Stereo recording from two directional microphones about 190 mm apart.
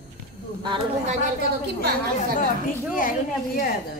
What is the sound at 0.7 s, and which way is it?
Speech, 25° right (ahead or behind).